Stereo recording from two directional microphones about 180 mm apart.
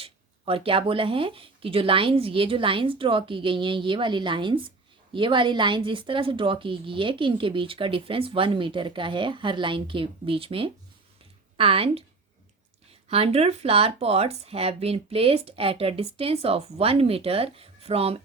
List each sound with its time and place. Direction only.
0.0 s speech: 30° right (ahead or behind)